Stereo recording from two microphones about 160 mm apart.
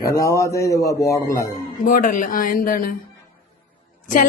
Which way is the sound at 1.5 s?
60° left (ahead or behind).